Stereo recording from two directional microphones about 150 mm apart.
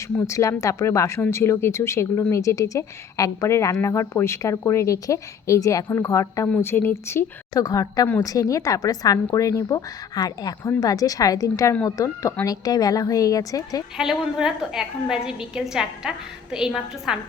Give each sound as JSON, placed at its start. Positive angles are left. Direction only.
{"t": 0.2, "sound": "speech", "side_deg": 20}
{"t": 13.9, "sound": "a woman's voice", "side_deg": -5}